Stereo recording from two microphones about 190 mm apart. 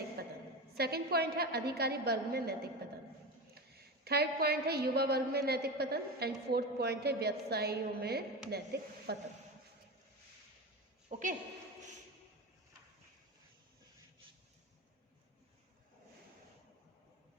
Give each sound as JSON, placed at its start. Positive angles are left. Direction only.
{"t": 0.2, "sound": "a sound", "side_deg": -55}
{"t": 0.8, "sound": "a woman's voice", "side_deg": -55}
{"t": 4.0, "sound": "a woman's voice", "side_deg": -55}
{"t": 11.1, "sound": "a woman's voice", "side_deg": -40}